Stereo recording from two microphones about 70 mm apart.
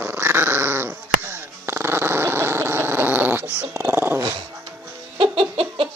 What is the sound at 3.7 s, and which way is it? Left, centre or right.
Dog, right.